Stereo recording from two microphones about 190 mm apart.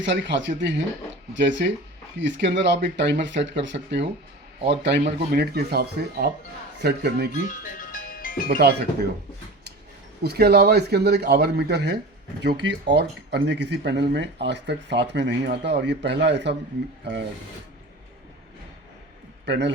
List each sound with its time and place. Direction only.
0.0 s speech: 70° right (ahead or behind)
7.4 s music: 45° left (ahead or behind)
8.4 s speech: 55° right (ahead or behind)
10.2 s speech: 55° right (ahead or behind)
19.5 s speech: 65° right (ahead or behind)